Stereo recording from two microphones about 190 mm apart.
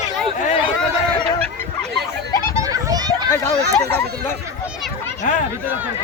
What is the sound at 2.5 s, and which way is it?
Children playing, 20° right (ahead or behind).